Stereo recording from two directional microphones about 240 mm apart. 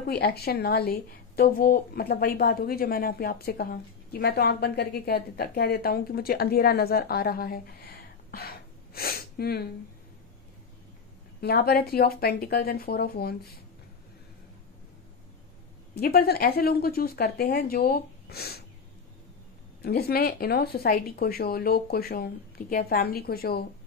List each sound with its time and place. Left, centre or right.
0.0 s speech: left
11.4 s speech: left
15.9 s speech: left
19.8 s speech: left